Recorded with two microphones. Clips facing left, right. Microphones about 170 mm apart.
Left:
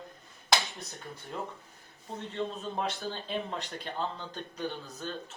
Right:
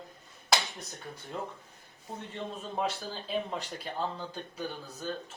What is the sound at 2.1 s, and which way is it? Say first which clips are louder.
Speech: left 3 dB; 10° right (ahead or behind).